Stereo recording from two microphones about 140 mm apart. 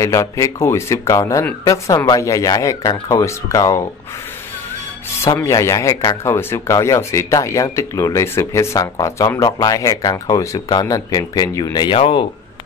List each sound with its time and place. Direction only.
0.0 s speech: 20° left (ahead or behind)
5.2 s speech: 20° left (ahead or behind); by 12.3 s 40° left (ahead or behind)